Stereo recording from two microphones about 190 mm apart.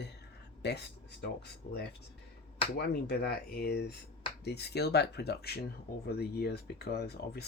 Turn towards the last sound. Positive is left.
turn(degrees=60)  # may be behind; listen again after turning